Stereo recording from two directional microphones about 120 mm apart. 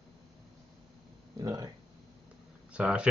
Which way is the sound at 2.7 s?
10° right (ahead or behind).